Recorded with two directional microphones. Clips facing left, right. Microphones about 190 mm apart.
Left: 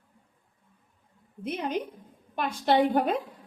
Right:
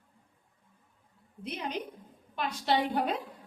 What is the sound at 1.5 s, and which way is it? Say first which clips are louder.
A woman's voice: left 6 dB; 50° left (ahead or behind).